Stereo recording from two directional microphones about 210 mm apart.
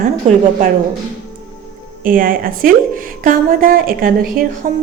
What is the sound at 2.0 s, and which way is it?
A woman's voice, 40° right (ahead or behind).